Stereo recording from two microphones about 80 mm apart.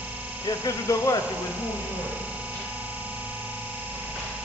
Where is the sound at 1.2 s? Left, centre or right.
Centre.